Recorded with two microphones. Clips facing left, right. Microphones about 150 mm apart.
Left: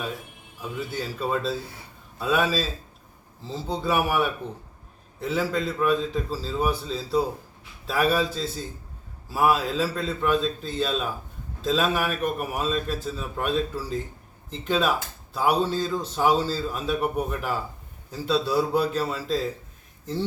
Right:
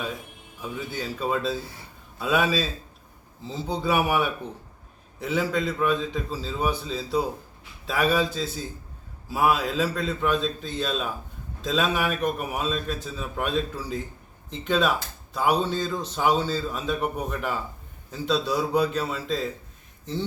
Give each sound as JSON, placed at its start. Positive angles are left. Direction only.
{"t": 0.6, "sound": "speech", "side_deg": 0}